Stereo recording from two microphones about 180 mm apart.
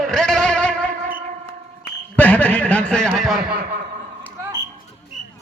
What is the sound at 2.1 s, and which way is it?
A man's voice, 10° left (ahead or behind).